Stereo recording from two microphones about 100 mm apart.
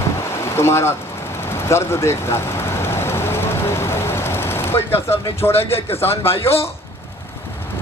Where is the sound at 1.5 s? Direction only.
25° left (ahead or behind).